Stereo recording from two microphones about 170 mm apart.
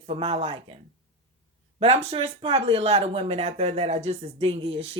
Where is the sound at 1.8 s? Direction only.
40° right (ahead or behind).